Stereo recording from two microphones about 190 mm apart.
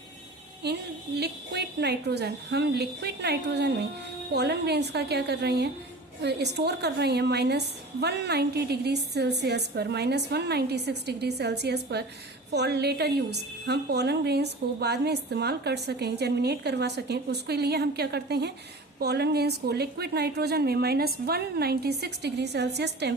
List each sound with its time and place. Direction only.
1.2 s a woman's voice: 60° right (ahead or behind)